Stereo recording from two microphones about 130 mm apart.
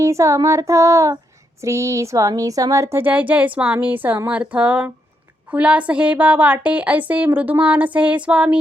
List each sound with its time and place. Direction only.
0.0 s speech: 25° right (ahead or behind)